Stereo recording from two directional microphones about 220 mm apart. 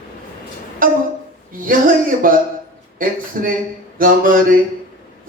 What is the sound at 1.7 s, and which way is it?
Speech, 40° right (ahead or behind).